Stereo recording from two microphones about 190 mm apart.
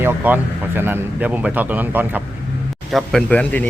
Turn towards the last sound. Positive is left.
turn(degrees=5)  # may be behind; listen again after turning